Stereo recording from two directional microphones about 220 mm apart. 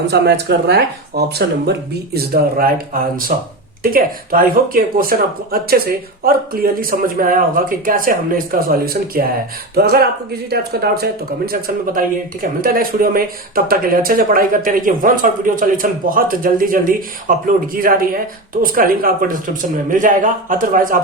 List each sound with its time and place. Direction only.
0.1 s a man's voice: 50° right (ahead or behind)